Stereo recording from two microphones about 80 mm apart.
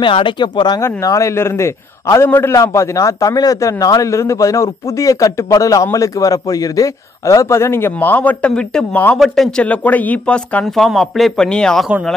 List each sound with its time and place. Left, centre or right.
0.0 s speech: left
0.7 s a man's voice: left
2.5 s a man's voice: left; by 9.0 s centre
9.2 s speech: centre
9.6 s speech: centre